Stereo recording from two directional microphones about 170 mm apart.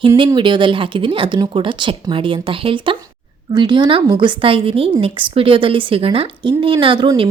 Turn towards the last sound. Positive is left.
turn(degrees=-30)  # may be behind; listen again after turning